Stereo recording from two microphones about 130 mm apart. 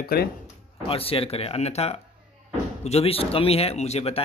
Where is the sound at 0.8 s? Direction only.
45° left (ahead or behind).